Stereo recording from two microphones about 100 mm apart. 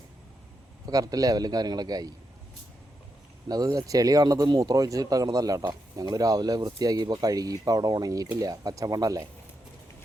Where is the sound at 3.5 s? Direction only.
40° right (ahead or behind).